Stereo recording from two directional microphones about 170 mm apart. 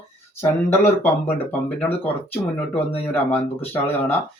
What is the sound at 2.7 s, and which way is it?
Speech, 10° left (ahead or behind).